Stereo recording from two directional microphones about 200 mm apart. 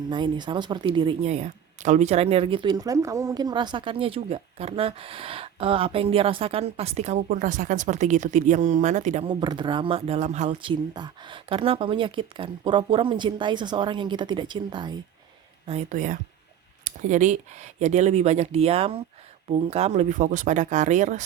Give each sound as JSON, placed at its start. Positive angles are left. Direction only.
{"t": 0.1, "sound": "speech", "side_deg": -20}
{"t": 15.6, "sound": "speech", "side_deg": -35}